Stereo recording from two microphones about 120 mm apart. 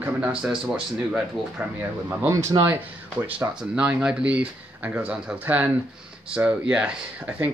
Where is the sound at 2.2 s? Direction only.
25° right (ahead or behind).